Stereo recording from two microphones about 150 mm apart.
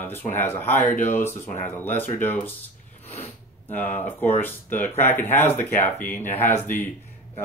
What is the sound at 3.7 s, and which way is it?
Speech, 15° left (ahead or behind).